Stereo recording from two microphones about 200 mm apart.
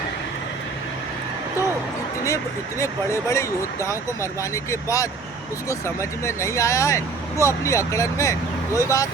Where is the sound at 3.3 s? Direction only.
15° left (ahead or behind).